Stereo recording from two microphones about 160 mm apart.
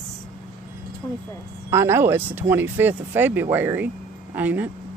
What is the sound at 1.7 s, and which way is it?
Speech, 15° right (ahead or behind).